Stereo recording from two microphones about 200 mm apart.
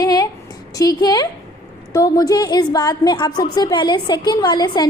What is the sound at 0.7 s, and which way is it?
A woman's voice, 15° left (ahead or behind).